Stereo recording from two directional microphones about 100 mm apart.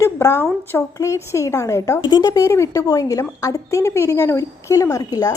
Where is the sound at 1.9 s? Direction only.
50° left (ahead or behind).